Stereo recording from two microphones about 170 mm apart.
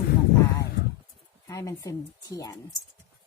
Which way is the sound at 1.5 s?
20° left (ahead or behind).